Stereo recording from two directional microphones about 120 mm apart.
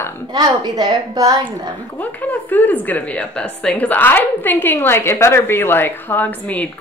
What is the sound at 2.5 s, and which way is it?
A woman's voice, 15° left (ahead or behind).